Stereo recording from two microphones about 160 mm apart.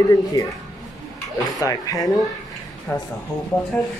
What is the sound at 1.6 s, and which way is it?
Speech, 20° left (ahead or behind).